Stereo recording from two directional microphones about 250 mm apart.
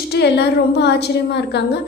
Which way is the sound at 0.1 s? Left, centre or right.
Left.